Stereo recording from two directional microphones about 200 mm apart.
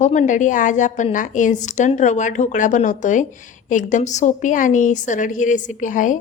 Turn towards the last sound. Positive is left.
turn(degrees=40)  # may be behind; listen again after turning